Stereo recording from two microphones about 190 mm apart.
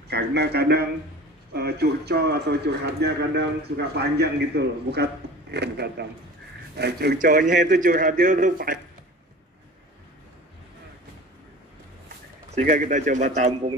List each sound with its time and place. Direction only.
0.1 s a man's voice: 60° right (ahead or behind)
12.4 s speech: 40° right (ahead or behind)